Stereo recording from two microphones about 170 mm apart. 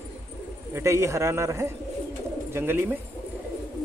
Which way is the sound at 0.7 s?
15° right (ahead or behind).